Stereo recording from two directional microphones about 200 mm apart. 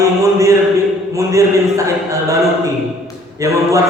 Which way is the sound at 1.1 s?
15° right (ahead or behind).